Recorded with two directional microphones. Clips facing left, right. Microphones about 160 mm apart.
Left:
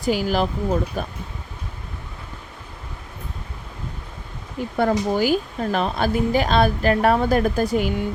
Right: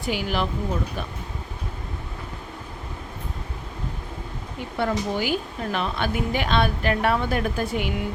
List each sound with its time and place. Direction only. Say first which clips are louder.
0.0 s a woman's voice: left 5 dB; 40° left (ahead or behind)
4.8 s a woman's voice: left 5 dB; 40° left (ahead or behind)